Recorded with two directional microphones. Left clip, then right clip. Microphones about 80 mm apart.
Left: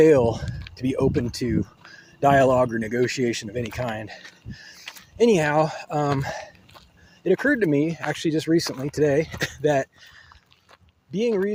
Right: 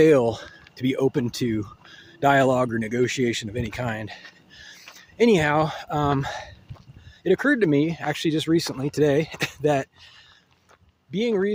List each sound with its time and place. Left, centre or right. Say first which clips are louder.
0.0 s speech: left 1 dB; right
1.6 s speech: right 1 dB; right
3.6 s speech: left 1 dB; right
6.1 s speech: right 1 dB; right
8.8 s speech: even; right